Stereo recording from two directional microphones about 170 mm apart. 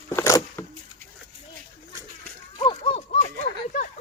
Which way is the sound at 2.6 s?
35° left (ahead or behind).